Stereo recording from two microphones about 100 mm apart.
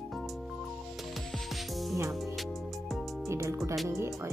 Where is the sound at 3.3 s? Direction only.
30° right (ahead or behind).